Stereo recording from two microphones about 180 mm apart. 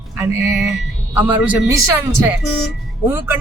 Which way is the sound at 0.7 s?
10° right (ahead or behind).